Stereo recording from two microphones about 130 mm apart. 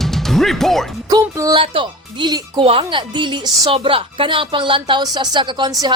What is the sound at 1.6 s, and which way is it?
Speech, 40° right (ahead or behind).